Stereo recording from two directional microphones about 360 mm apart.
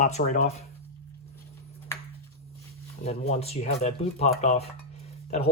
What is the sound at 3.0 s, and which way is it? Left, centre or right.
Speech, centre.